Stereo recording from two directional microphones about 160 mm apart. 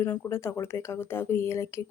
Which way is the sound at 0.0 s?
15° left (ahead or behind).